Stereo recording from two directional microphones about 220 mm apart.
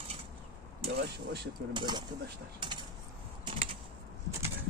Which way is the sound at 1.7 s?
20° right (ahead or behind).